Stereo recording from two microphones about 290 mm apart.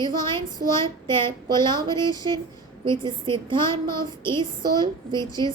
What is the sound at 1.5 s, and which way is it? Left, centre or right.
A woman's voice, centre.